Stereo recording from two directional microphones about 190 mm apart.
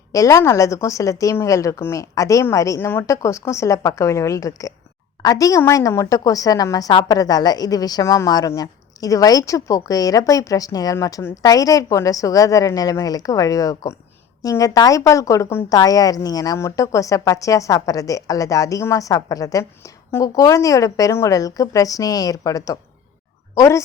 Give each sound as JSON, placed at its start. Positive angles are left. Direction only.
{"t": 0.1, "sound": "a woman's voice", "side_deg": 15}